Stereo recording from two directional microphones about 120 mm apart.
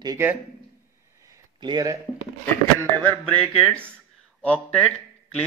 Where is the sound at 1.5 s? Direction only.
35° right (ahead or behind).